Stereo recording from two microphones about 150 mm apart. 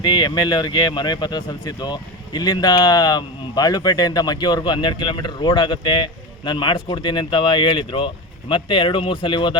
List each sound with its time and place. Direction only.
0.0 s speech: 30° left (ahead or behind)